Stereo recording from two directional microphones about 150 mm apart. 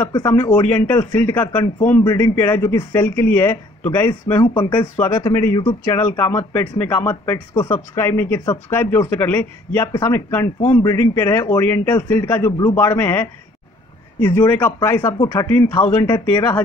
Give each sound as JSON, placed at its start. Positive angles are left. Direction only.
{"t": 0.5, "sound": "speech", "side_deg": 10}
{"t": 4.6, "sound": "speech", "side_deg": 30}
{"t": 4.9, "sound": "speech", "side_deg": 15}
{"t": 5.6, "sound": "speech", "side_deg": 30}
{"t": 5.9, "sound": "speech", "side_deg": 15}
{"t": 15.4, "sound": "speech", "side_deg": 10}